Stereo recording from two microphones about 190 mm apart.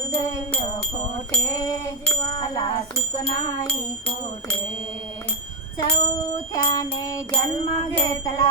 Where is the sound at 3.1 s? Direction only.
20° left (ahead or behind).